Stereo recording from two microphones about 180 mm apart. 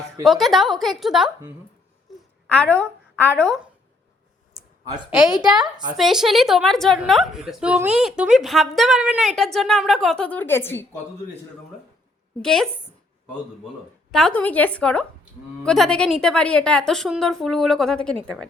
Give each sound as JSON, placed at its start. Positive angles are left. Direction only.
{"t": 0.3, "sound": "a woman's voice", "side_deg": 0}
{"t": 2.0, "sound": "a sound", "side_deg": 5}
{"t": 4.9, "sound": "a woman's voice", "side_deg": -5}
{"t": 5.5, "sound": "a woman's voice", "side_deg": -25}
{"t": 6.0, "sound": "a woman's voice", "side_deg": 0}
{"t": 12.4, "sound": "a woman's voice", "side_deg": 5}
{"t": 14.1, "sound": "a woman's voice", "side_deg": 5}